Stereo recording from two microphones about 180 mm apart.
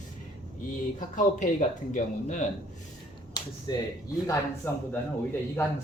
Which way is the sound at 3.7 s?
25° left (ahead or behind).